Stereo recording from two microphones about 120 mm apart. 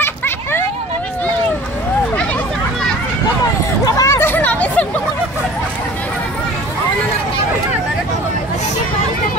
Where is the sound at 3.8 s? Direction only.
25° left (ahead or behind).